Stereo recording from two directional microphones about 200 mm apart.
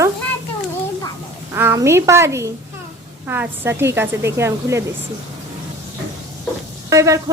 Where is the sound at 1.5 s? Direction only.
10° right (ahead or behind).